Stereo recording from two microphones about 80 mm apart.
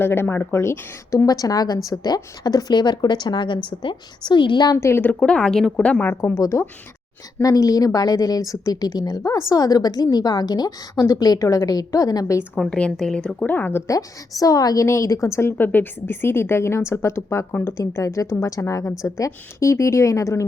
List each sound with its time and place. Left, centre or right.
0.0 s a woman's voice: left
4.8 s a woman's voice: left
5.2 s a woman's voice: centre
5.8 s a woman's voice: centre
6.4 s a woman's voice: left
12.5 s a woman's voice: centre; by 13.8 s left
13.8 s a woman's voice: left
14.8 s a woman's voice: left